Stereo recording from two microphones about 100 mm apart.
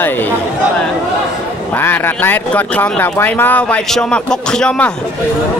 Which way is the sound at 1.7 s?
20° left (ahead or behind).